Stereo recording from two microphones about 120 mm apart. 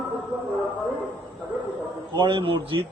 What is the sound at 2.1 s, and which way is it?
Speech, 40° right (ahead or behind).